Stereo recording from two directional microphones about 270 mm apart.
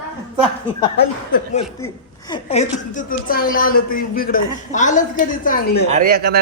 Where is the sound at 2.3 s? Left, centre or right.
Left.